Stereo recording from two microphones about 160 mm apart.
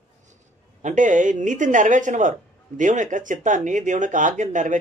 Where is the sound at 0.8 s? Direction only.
55° right (ahead or behind).